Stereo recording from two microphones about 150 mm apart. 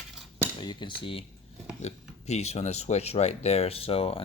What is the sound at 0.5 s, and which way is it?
Speech, 30° left (ahead or behind).